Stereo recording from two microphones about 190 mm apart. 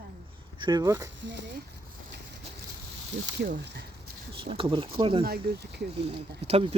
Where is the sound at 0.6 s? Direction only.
20° right (ahead or behind).